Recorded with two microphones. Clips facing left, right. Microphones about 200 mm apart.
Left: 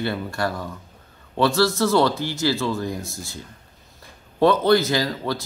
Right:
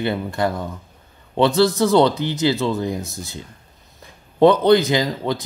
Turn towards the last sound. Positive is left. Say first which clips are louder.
# right 3 dB
turn(degrees=-20)  # may be behind; listen again after turning